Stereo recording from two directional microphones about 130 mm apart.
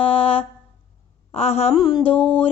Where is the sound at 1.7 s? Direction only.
30° left (ahead or behind).